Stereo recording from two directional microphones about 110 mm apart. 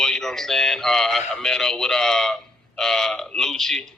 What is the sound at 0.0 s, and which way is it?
A man's voice, 5° left (ahead or behind).